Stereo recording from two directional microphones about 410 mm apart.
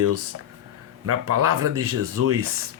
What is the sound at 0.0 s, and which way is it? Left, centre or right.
Speech, right.